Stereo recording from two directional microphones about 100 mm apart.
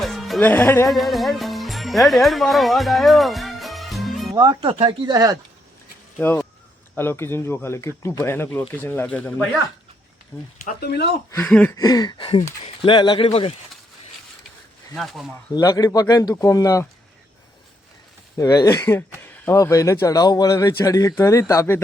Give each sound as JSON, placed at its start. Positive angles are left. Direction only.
{"t": 0.0, "sound": "music", "side_deg": 0}
{"t": 0.3, "sound": "speech", "side_deg": 20}
{"t": 0.9, "sound": "speech", "side_deg": 0}
{"t": 4.4, "sound": "speech", "side_deg": -45}
{"t": 4.7, "sound": "speech", "side_deg": -55}
{"t": 6.1, "sound": "speech", "side_deg": 20}
{"t": 11.4, "sound": "speech", "side_deg": 10}
{"t": 11.7, "sound": "speech", "side_deg": 35}
{"t": 12.1, "sound": "a sound", "side_deg": 65}
{"t": 12.6, "sound": "speech", "side_deg": 55}
{"t": 14.9, "sound": "speech", "side_deg": 0}
{"t": 15.5, "sound": "speech", "side_deg": 40}
{"t": 18.3, "sound": "speech", "side_deg": 35}
{"t": 18.8, "sound": "speech", "side_deg": 25}